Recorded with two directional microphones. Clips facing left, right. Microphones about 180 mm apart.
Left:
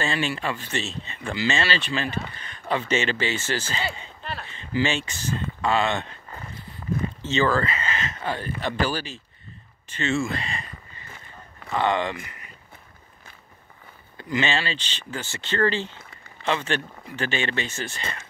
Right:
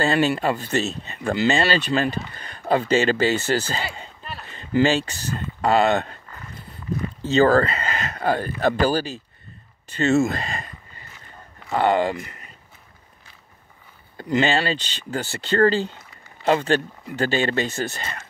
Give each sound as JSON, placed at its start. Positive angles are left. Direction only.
{"t": 0.0, "sound": "speech", "side_deg": -40}
{"t": 7.2, "sound": "speech", "side_deg": -40}
{"t": 11.7, "sound": "speech", "side_deg": -35}
{"t": 14.1, "sound": "speech", "side_deg": -40}